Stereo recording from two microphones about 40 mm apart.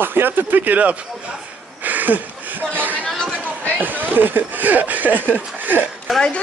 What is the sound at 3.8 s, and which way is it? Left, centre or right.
Speech, right.